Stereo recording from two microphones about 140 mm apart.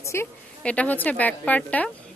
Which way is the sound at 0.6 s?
10° left (ahead or behind).